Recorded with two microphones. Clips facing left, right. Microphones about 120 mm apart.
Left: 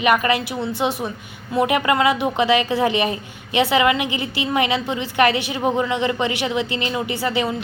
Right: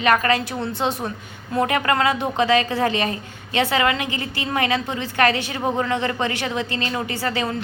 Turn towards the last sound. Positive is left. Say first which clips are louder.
# left 2 dB
turn(degrees=15)  # may be behind; listen again after turning